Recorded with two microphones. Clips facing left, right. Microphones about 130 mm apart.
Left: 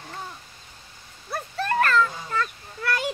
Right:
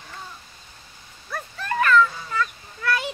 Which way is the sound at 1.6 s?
50° left (ahead or behind).